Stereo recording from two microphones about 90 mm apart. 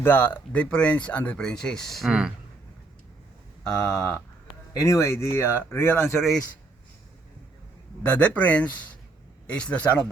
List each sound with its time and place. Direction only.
0.0 s speech: 20° left (ahead or behind); by 2.1 s centre (ahead or behind)
3.6 s speech: 10° left (ahead or behind)
4.7 s speech: 35° left (ahead or behind)
8.0 s speech: 15° left (ahead or behind)